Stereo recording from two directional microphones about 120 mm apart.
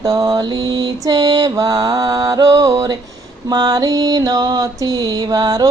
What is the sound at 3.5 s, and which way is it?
Mantra, 30° right (ahead or behind).